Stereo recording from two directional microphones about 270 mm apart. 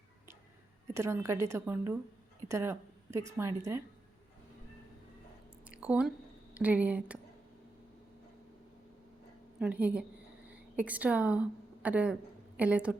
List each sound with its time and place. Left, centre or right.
0.9 s a woman's voice: centre
5.6 s a sound: centre
9.6 s a woman's voice: centre